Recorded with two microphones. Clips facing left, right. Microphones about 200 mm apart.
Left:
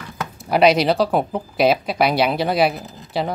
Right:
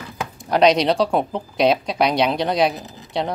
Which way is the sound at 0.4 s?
5° left (ahead or behind).